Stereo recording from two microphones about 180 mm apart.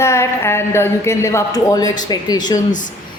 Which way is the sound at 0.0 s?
15° left (ahead or behind).